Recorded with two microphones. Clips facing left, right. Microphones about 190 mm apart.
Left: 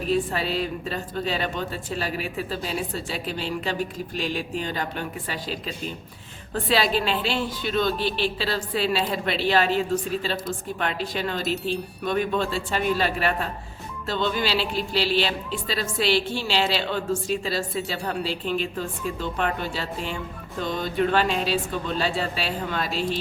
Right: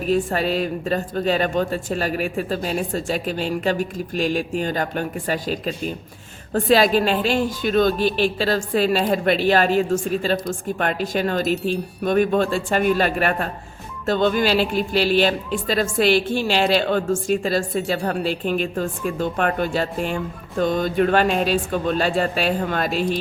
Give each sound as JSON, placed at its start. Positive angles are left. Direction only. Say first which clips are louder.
{"t": 0.1, "sound": "a woman's voice", "louder": "right 4 dB", "side_deg": -45}